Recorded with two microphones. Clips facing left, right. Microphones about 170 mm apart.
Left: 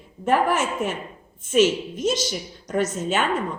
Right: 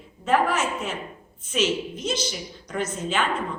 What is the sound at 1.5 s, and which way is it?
A woman's voice, 45° left (ahead or behind).